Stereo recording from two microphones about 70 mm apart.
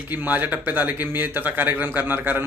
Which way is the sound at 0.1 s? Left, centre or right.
Right.